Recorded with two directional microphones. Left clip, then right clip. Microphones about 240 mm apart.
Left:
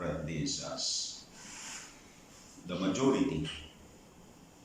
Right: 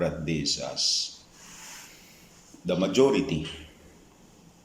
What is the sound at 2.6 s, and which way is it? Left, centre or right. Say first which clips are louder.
Speech: right 9 dB; right.